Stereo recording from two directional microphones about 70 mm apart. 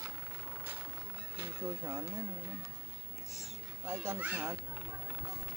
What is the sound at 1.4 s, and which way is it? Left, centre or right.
Speech, right.